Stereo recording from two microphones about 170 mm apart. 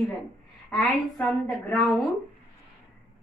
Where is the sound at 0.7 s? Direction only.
Centre (ahead or behind).